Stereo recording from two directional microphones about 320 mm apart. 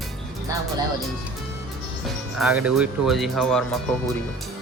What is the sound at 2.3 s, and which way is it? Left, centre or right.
Speech, centre.